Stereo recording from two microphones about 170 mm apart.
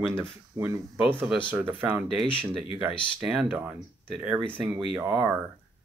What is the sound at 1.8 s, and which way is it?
Speech, 10° right (ahead or behind).